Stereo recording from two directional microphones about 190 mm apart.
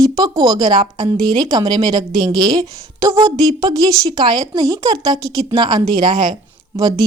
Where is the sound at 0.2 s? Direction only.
20° right (ahead or behind).